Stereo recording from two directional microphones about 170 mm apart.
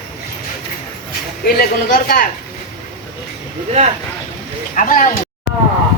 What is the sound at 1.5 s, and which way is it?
Speech, 60° left (ahead or behind).